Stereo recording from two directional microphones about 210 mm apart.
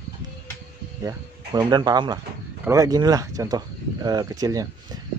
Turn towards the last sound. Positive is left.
turn(degrees=-20)  # may be behind; listen again after turning